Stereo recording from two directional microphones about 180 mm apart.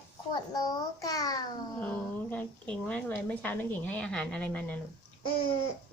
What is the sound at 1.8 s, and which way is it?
A woman's voice, 10° left (ahead or behind).